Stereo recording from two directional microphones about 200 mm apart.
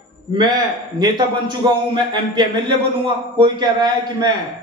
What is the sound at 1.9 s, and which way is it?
A man's voice, 20° right (ahead or behind).